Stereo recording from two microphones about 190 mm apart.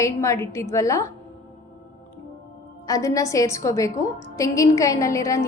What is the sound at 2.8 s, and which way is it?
A woman's voice, 15° left (ahead or behind).